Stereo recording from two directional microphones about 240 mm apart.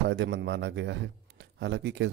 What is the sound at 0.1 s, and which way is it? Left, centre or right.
Speech, right.